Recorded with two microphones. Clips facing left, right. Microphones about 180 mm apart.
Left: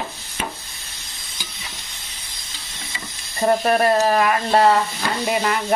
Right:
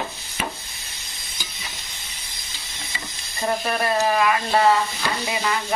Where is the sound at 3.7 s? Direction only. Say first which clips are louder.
Left 5 dB; 40° left (ahead or behind).